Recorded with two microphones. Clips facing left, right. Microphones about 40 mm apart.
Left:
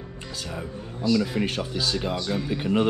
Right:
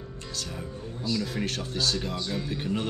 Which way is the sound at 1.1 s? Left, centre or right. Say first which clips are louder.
Left 6 dB; left.